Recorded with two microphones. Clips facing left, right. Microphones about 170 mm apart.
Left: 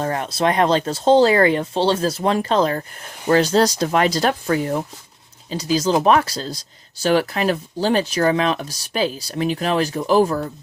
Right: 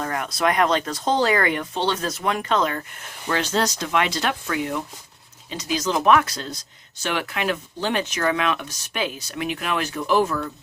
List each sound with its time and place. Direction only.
0.0 s speech: 30° left (ahead or behind)